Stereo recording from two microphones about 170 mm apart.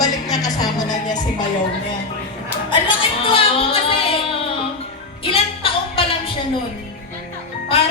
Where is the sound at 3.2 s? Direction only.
35° left (ahead or behind).